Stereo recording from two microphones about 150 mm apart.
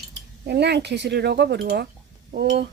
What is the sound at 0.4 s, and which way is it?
Speech, 90° right.